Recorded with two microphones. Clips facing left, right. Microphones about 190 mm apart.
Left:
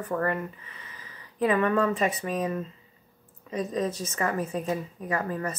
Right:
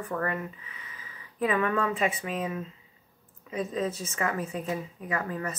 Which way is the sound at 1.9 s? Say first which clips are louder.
Left 2 dB; 40° left (ahead or behind).